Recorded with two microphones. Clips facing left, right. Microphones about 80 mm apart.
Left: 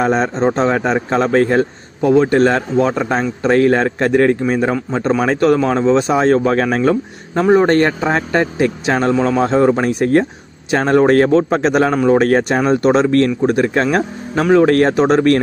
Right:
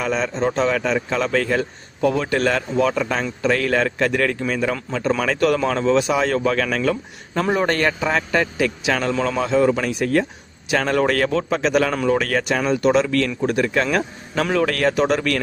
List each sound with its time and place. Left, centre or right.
0.0 s a man's voice: left
2.0 s a man's voice: left